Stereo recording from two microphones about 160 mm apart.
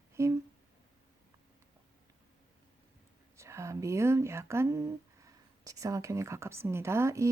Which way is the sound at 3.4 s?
20° right (ahead or behind).